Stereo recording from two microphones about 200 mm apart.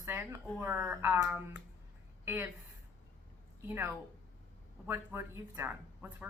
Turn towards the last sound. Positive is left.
turn(degrees=-10)  # may be behind; listen again after turning